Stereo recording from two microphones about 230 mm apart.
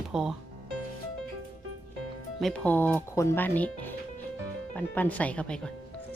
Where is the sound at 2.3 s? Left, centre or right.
Centre.